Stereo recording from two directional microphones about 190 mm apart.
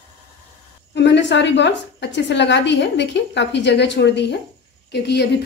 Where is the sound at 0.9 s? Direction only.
70° left (ahead or behind).